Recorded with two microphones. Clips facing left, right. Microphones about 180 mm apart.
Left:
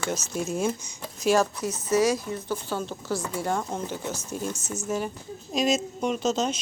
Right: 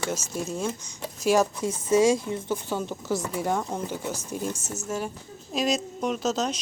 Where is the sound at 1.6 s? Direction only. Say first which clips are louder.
Right 2 dB; 25° right (ahead or behind).